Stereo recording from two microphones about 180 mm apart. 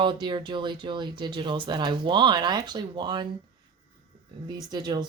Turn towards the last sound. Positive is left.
turn(degrees=-25)  # may be behind; listen again after turning